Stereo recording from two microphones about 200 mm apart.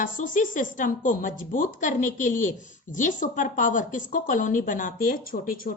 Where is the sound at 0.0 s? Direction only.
40° left (ahead or behind).